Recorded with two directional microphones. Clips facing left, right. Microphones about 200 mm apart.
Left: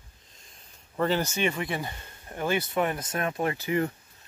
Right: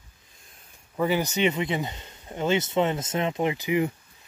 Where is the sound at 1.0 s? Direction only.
15° right (ahead or behind).